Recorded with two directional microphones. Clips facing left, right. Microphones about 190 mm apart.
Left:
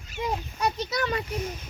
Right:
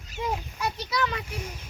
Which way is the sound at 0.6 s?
40° left (ahead or behind).